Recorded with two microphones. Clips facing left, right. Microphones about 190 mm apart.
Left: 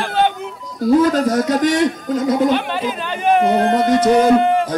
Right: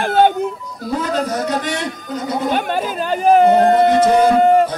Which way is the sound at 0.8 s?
45° left (ahead or behind).